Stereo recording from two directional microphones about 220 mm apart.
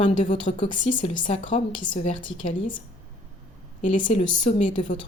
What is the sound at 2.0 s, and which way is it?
Speech, 25° left (ahead or behind).